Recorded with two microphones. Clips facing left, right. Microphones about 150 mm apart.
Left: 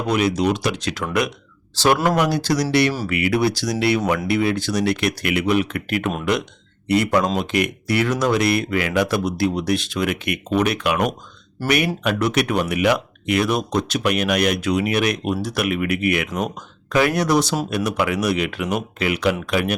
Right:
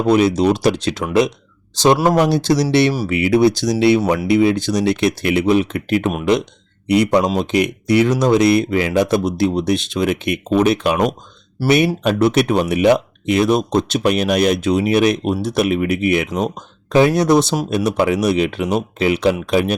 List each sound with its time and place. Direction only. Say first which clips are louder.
0.1 s speech: right 5 dB; 30° right (ahead or behind)
1.7 s speech: right 4 dB; 20° right (ahead or behind)
12.0 s speech: right 5 dB; 30° right (ahead or behind)